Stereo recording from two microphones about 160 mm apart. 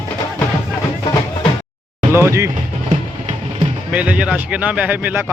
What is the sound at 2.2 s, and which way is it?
Speech, 15° right (ahead or behind).